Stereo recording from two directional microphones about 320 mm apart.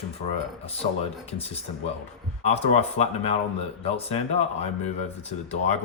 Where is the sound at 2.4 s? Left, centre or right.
Centre.